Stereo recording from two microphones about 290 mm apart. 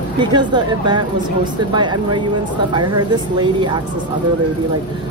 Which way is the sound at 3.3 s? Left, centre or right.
Centre.